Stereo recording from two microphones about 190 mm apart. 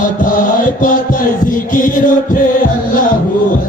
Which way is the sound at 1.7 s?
45° left (ahead or behind).